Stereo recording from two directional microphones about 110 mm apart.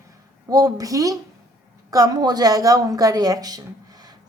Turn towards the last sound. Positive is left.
turn(degrees=-35)  # may be behind; listen again after turning